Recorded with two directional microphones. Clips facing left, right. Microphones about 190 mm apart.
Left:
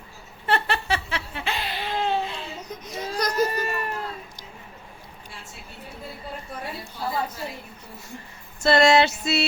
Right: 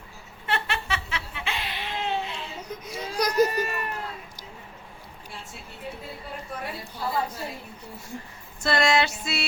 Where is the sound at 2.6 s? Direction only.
10° right (ahead or behind).